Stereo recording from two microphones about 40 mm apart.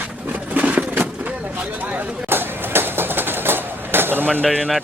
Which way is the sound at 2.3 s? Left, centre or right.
Right.